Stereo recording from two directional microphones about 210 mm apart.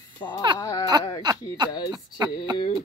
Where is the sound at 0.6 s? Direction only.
20° left (ahead or behind).